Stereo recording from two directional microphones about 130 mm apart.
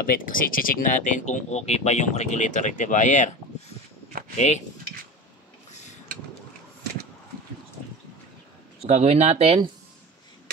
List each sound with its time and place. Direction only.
0.1 s speech: 90° left; by 3.3 s 70° left (ahead or behind)
8.8 s speech: 60° right (ahead or behind)